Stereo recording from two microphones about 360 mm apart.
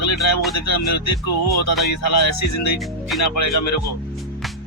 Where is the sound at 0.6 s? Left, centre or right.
Left.